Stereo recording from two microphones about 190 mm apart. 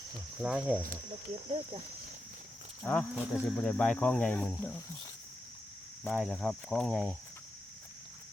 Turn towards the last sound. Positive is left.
turn(degrees=5)  # may be behind; listen again after turning